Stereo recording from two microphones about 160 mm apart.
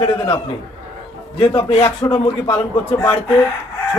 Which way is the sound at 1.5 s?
30° left (ahead or behind).